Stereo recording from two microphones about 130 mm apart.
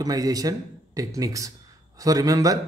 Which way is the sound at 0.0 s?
30° right (ahead or behind).